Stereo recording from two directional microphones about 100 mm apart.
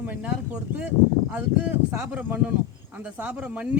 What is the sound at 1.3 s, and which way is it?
Speech, 15° right (ahead or behind).